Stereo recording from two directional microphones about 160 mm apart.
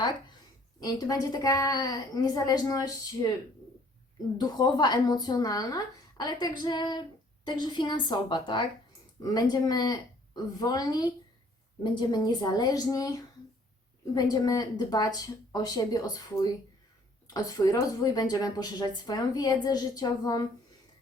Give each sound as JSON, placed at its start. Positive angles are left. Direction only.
{"t": 0.8, "sound": "speech", "side_deg": 25}
{"t": 4.4, "sound": "speech", "side_deg": 25}
{"t": 17.2, "sound": "speech", "side_deg": 25}